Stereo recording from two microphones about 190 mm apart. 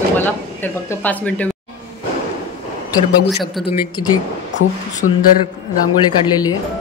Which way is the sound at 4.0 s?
20° left (ahead or behind).